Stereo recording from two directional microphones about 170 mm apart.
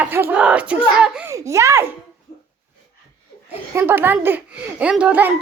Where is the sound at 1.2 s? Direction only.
15° right (ahead or behind).